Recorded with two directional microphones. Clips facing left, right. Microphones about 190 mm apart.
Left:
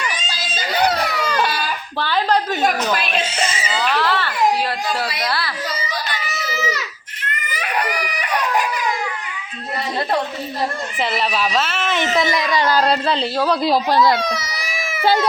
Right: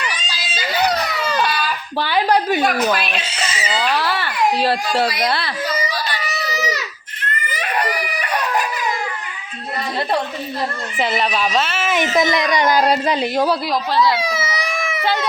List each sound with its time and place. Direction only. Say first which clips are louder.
0.1 s baby cry: left 1 dB; 45° left (ahead or behind)
2.0 s speech: right 2 dB; 10° right (ahead or behind)
2.9 s speech: left 1 dB; 50° left (ahead or behind)
3.8 s speech: left 1 dB; 10° right (ahead or behind)
4.6 s a child's voice: right 5 dB; 30° right (ahead or behind)
7.7 s chicken: right 1 dB; 15° left (ahead or behind)
11.0 s speech: right 2 dB; centre (ahead or behind); by 13.5 s 15° right (ahead or behind)
13.9 s a child's voice: even; 45° left (ahead or behind)
14.2 s a sound: right 2 dB; 5° right (ahead or behind)